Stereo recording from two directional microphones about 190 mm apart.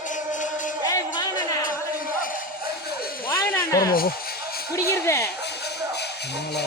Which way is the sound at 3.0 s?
50° left (ahead or behind).